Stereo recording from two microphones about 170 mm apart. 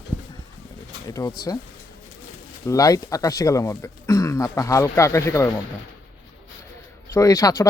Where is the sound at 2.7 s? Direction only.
20° left (ahead or behind).